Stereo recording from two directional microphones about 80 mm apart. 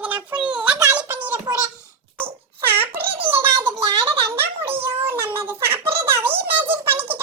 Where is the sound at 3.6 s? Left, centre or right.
Right.